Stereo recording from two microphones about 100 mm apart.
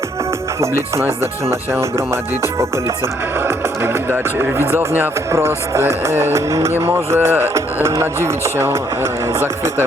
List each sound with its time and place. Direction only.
0.9 s music: 25° right (ahead or behind)
3.4 s speech: 25° right (ahead or behind)
4.9 s music: 25° right (ahead or behind)